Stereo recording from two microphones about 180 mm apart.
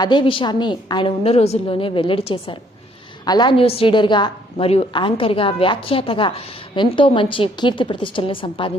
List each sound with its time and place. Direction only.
0.0 s a woman's voice: 25° left (ahead or behind)